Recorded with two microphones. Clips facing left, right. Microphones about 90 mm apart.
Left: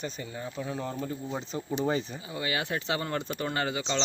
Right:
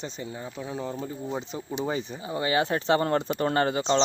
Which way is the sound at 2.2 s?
30° right (ahead or behind).